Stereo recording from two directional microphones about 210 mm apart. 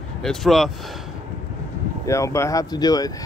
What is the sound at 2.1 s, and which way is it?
Speech, 15° left (ahead or behind).